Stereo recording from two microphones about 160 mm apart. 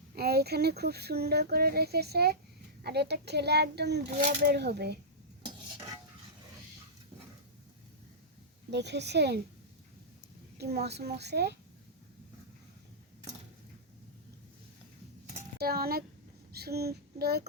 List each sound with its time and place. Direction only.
0.1 s a child's voice: 80° right
8.7 s a child's voice: 90° right
10.6 s a child's voice: 90° right
15.5 s speech: 70° right (ahead or behind)
16.5 s child singing: 80° right